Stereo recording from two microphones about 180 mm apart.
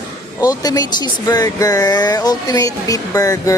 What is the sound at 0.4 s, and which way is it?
Speech, 20° left (ahead or behind).